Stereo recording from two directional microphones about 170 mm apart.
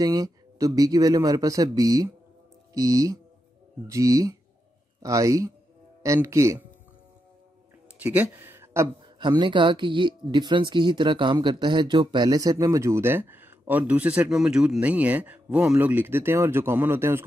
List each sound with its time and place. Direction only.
0.0 s speech: 20° right (ahead or behind)
8.0 s a sound: 10° right (ahead or behind)
9.0 s speech: 30° right (ahead or behind)